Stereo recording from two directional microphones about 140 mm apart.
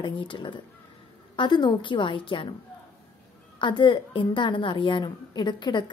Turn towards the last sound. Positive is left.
turn(degrees=30)  # may be behind; listen again after turning